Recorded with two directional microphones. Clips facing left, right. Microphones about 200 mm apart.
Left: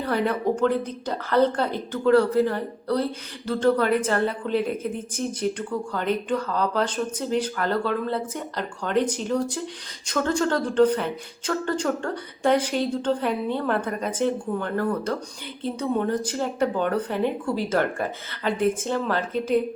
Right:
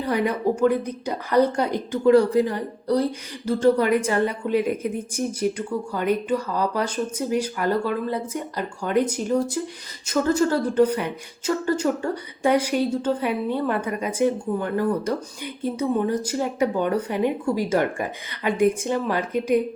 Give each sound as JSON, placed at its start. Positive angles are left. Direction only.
{"t": 0.0, "sound": "speech", "side_deg": -10}